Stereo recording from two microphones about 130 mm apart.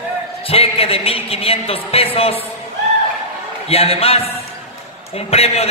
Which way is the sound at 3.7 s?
50° left (ahead or behind).